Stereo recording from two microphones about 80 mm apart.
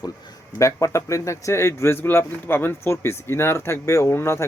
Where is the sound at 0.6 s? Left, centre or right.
Left.